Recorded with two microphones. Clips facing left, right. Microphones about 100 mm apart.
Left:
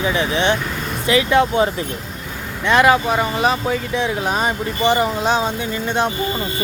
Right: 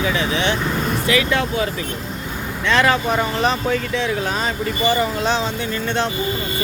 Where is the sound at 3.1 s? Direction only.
5° left (ahead or behind).